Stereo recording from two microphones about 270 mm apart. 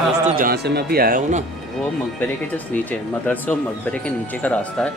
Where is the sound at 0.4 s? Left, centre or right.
Right.